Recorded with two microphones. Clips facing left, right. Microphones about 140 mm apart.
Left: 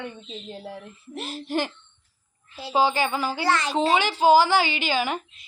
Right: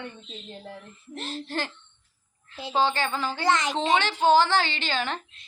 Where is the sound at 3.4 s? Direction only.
20° right (ahead or behind).